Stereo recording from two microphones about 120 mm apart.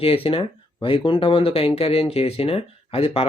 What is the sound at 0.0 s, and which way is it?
Speech, 50° left (ahead or behind).